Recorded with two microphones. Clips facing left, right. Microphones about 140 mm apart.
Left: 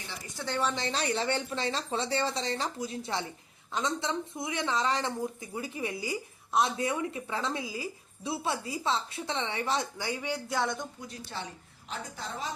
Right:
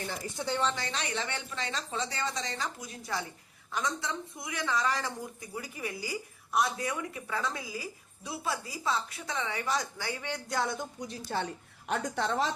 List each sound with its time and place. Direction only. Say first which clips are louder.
0.4 s speech: right 2 dB; 15° right (ahead or behind)
0.8 s speech: left 4 dB; 35° left (ahead or behind); by 10.4 s 15° left (ahead or behind)
10.5 s speech: even; centre (ahead or behind)
11.3 s a woman's voice: right 6 dB; 45° right (ahead or behind)
11.9 s a woman's voice: right 8 dB; 70° right (ahead or behind)